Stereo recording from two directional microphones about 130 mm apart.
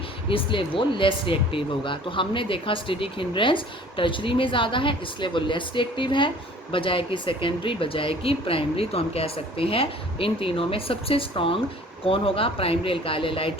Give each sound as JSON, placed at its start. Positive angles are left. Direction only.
{"t": 0.3, "sound": "speech", "side_deg": 45}